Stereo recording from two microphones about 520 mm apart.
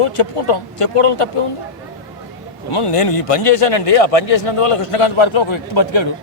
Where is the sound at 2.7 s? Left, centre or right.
Left.